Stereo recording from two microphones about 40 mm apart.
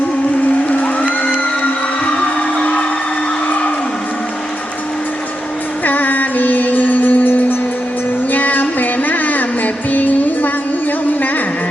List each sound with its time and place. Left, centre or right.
5.8 s music: left